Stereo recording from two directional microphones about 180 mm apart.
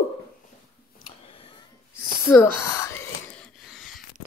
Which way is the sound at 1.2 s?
35° left (ahead or behind).